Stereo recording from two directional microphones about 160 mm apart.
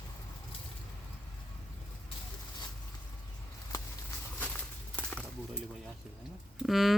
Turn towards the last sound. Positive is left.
turn(degrees=0)  # may be behind; listen again after turning